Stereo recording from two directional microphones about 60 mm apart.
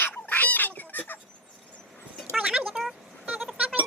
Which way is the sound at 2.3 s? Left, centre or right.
Centre.